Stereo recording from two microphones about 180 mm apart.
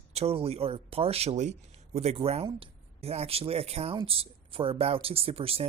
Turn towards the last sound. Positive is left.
turn(degrees=-30)  # may be behind; listen again after turning